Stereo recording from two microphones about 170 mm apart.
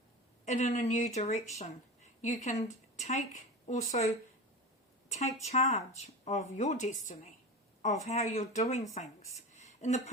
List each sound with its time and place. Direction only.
0.4 s speech: 45° left (ahead or behind)